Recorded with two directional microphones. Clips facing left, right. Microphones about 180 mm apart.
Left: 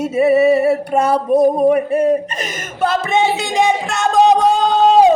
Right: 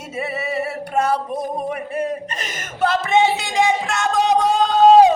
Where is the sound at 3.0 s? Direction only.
20° left (ahead or behind).